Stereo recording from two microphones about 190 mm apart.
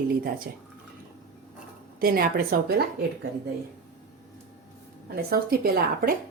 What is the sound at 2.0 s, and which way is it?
Speech, 50° right (ahead or behind).